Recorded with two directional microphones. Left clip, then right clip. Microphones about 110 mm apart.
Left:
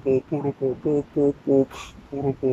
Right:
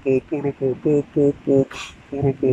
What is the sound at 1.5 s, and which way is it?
Speech, 20° left (ahead or behind).